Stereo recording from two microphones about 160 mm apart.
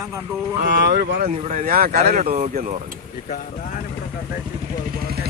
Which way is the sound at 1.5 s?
60° right (ahead or behind).